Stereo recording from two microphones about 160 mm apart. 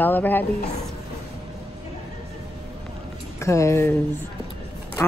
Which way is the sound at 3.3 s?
20° left (ahead or behind).